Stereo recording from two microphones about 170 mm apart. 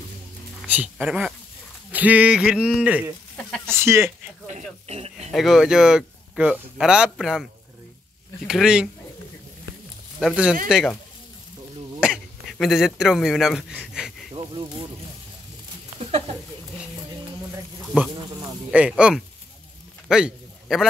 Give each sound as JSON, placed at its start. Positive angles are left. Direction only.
{"t": 0.7, "sound": "speech", "side_deg": -10}
{"t": 3.3, "sound": "speech", "side_deg": 5}
{"t": 3.7, "sound": "speech", "side_deg": -15}
{"t": 4.5, "sound": "speech", "side_deg": -40}
{"t": 5.3, "sound": "speech", "side_deg": 0}
{"t": 8.5, "sound": "speech", "side_deg": -5}
{"t": 10.2, "sound": "speech", "side_deg": -5}
{"t": 12.0, "sound": "speech", "side_deg": 0}
{"t": 14.3, "sound": "speech", "side_deg": -30}
{"t": 16.0, "sound": "speech", "side_deg": -35}
{"t": 17.9, "sound": "speech", "side_deg": -5}
{"t": 20.1, "sound": "a sound", "side_deg": -5}